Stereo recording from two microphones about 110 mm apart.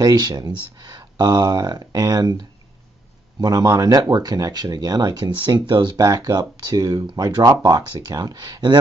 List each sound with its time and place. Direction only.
0.0 s speech: 35° right (ahead or behind)
3.3 s speech: 35° right (ahead or behind)
5.9 s speech: 35° right (ahead or behind)